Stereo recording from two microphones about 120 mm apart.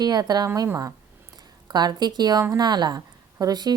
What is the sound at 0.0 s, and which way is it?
A woman's voice, 35° right (ahead or behind).